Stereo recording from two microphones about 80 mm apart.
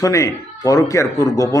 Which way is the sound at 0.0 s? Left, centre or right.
Left.